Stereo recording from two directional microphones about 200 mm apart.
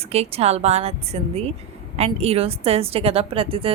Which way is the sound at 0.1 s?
30° right (ahead or behind).